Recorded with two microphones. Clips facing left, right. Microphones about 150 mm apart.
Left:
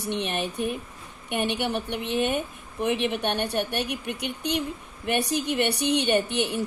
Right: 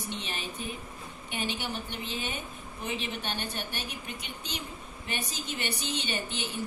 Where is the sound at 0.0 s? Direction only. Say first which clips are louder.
Left 9 dB; 65° left (ahead or behind).